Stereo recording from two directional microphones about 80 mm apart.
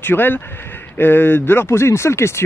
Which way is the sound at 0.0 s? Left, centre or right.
Left.